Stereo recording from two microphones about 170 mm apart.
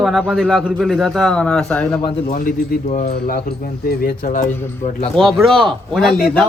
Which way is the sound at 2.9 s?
45° left (ahead or behind).